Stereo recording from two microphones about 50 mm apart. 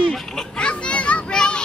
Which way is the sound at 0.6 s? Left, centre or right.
Left.